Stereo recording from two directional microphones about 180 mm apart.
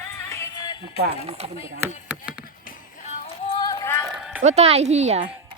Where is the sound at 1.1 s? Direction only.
35° right (ahead or behind).